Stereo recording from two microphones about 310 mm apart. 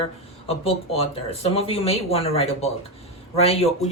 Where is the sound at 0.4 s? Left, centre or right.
Centre.